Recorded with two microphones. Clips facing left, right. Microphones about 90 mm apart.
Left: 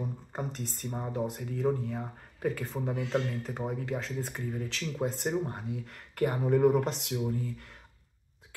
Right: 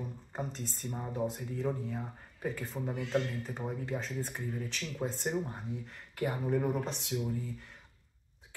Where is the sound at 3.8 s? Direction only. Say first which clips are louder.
Left 2 dB; 70° left (ahead or behind).